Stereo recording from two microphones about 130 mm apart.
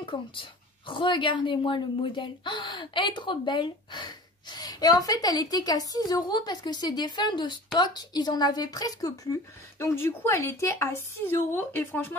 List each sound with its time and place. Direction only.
0.0 s a woman's voice: 40° left (ahead or behind); by 12.2 s 15° left (ahead or behind)